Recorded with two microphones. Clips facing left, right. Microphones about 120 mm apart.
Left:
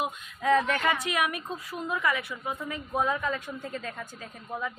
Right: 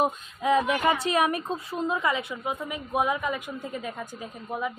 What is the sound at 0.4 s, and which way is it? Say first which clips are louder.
Speech: right 2 dB; 15° right (ahead or behind).